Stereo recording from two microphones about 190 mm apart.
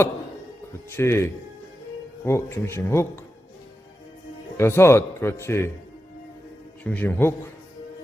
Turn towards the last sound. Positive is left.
turn(degrees=10)  # may be behind; listen again after turning